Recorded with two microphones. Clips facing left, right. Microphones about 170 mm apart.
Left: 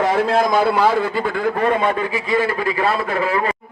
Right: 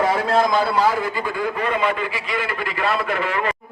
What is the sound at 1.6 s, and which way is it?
A man's voice, 45° left (ahead or behind).